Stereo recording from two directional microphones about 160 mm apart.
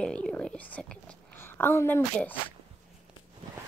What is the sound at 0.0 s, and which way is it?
Speech, 5° left (ahead or behind).